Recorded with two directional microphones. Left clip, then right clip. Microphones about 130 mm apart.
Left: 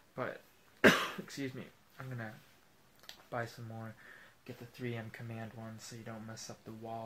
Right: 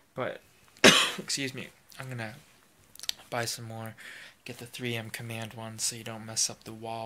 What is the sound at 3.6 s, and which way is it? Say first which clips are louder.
Speech: right 7 dB; 30° right (ahead or behind).